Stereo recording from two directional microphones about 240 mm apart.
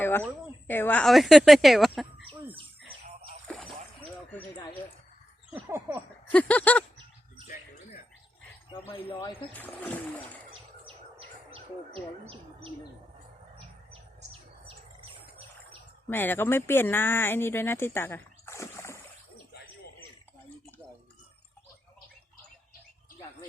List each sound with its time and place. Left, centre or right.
0.0 s a sound: centre
0.7 s speech: centre
3.4 s splash: centre
5.6 s speech: centre
6.3 s speech: centre
8.9 s speech: centre
9.5 s speech: centre
10.8 s bird: right
16.0 s speech: centre